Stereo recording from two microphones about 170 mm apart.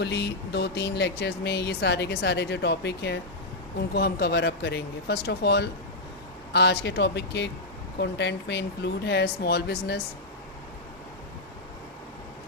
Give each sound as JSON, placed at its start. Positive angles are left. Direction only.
{"t": 0.0, "sound": "speech", "side_deg": 85}